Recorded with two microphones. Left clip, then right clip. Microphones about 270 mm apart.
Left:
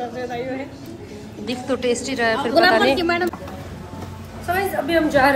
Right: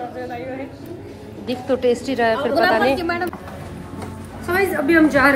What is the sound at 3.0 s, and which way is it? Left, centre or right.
Speech, left.